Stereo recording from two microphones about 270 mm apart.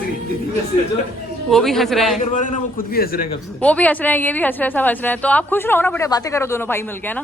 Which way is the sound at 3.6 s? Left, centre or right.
Centre.